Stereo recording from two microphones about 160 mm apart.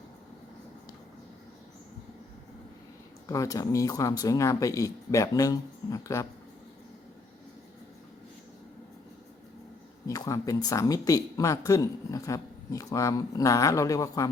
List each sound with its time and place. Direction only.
3.2 s speech: 20° left (ahead or behind)
10.1 s speech: 20° left (ahead or behind)